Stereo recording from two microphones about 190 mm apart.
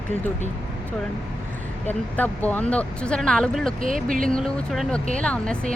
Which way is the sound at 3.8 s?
45° right (ahead or behind).